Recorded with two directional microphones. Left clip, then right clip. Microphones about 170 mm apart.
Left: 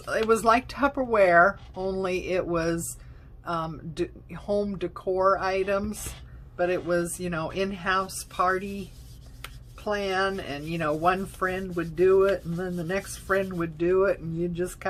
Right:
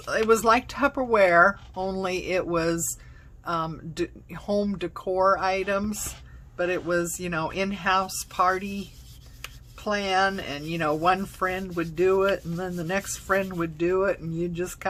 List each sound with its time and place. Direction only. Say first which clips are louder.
0.0 s speech: right 1 dB; 20° right (ahead or behind)